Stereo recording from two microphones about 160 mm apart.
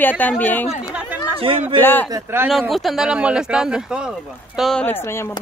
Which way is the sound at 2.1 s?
15° right (ahead or behind).